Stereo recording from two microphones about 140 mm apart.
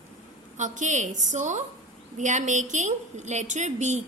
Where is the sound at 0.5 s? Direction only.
60° right (ahead or behind).